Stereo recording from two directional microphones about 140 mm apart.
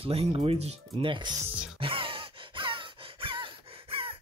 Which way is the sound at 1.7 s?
40° right (ahead or behind).